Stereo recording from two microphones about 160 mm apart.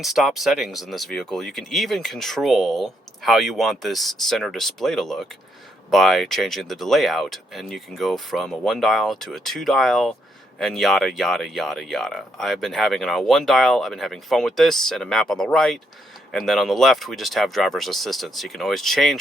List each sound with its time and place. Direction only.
0.0 s speech: centre (ahead or behind)